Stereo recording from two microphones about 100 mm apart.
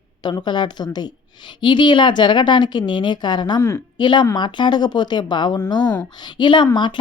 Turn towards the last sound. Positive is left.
turn(degrees=50)  # may be behind; listen again after turning